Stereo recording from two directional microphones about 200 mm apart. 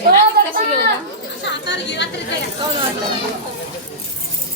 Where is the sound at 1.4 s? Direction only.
60° left (ahead or behind).